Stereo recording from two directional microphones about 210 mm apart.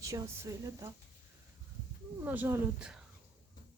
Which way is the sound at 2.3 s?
10° right (ahead or behind).